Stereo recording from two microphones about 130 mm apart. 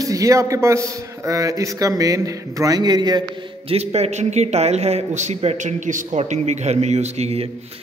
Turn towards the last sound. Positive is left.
turn(degrees=-50)  # may be behind; listen again after turning